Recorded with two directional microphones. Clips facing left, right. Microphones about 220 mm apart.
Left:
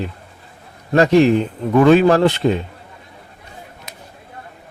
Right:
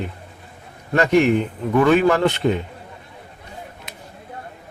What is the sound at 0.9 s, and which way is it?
A man's voice, 35° left (ahead or behind).